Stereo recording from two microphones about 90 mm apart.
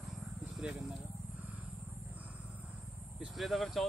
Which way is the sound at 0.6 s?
10° right (ahead or behind).